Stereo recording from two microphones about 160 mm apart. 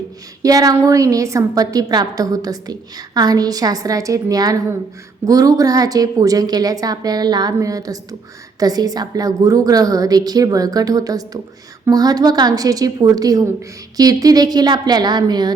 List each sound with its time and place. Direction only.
0.4 s a woman's voice: 20° right (ahead or behind)